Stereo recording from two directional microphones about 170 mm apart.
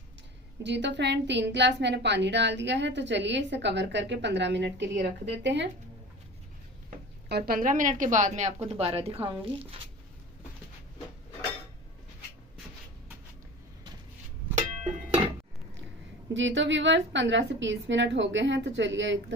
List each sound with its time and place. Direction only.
0.6 s a woman's voice: 90° right
7.3 s a woman's voice: 65° right (ahead or behind); by 9.5 s 30° right (ahead or behind)
16.3 s a woman's voice: 90° right